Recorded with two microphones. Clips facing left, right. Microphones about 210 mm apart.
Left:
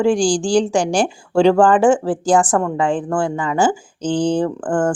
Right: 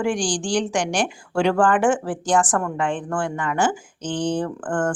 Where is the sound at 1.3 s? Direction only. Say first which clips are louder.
Left 6 dB; 30° left (ahead or behind).